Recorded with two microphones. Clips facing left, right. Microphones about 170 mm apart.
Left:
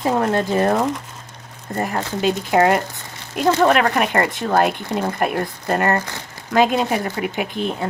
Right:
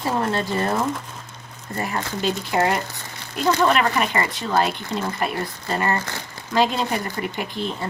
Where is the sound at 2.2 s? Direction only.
60° left (ahead or behind).